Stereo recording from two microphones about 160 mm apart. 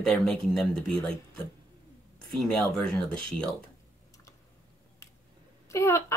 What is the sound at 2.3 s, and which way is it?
Speech, centre (ahead or behind).